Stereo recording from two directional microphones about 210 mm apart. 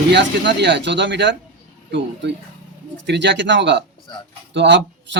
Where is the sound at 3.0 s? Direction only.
55° right (ahead or behind).